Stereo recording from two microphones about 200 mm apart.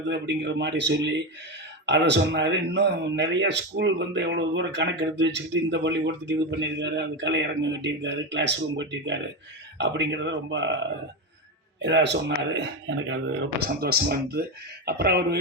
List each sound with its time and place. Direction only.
0.1 s speech: 60° right (ahead or behind)
11.8 s speech: 60° right (ahead or behind)
13.6 s speech: 50° right (ahead or behind)